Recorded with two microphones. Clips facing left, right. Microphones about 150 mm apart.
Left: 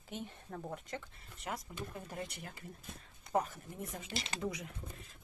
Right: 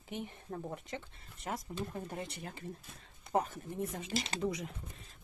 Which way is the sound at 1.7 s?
40° right (ahead or behind).